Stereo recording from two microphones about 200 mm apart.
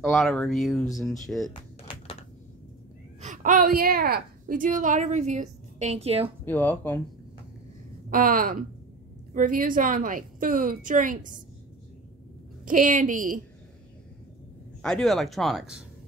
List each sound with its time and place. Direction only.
0.1 s speech: centre (ahead or behind)
1.5 s a sound: 25° left (ahead or behind)
3.2 s a woman's voice: 40° right (ahead or behind)
6.4 s speech: 10° left (ahead or behind)
8.1 s a woman's voice: 45° right (ahead or behind)
12.6 s a woman's voice: 40° right (ahead or behind)
14.8 s speech: 5° left (ahead or behind)